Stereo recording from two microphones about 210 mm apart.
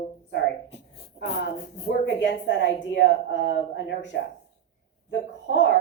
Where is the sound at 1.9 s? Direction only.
60° left (ahead or behind).